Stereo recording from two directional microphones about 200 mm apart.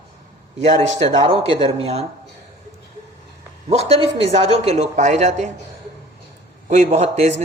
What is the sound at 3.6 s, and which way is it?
Speech, 30° right (ahead or behind).